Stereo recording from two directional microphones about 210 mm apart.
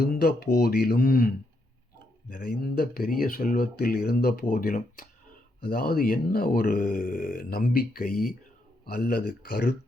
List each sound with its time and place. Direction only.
0.0 s speech: 45° left (ahead or behind)
2.3 s speech: 40° left (ahead or behind)